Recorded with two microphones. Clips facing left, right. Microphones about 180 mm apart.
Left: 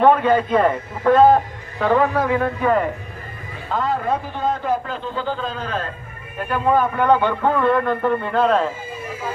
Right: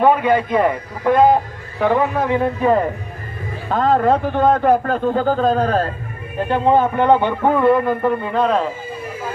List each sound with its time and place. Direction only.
0.0 s a man's voice: 10° right (ahead or behind)
3.7 s a man's voice: 55° right (ahead or behind); by 5.9 s 40° right (ahead or behind)
6.4 s a man's voice: 25° right (ahead or behind); by 8.7 s centre (ahead or behind)